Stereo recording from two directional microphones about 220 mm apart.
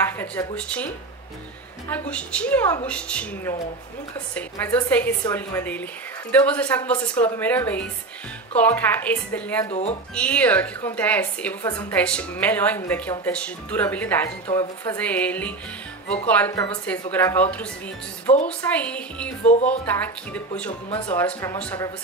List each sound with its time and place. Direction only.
0.0 s speech: 10° left (ahead or behind)
1.9 s a woman's voice: 5° left (ahead or behind)
9.7 s speech: 30° left (ahead or behind)
10.1 s a woman's voice: 5° left (ahead or behind)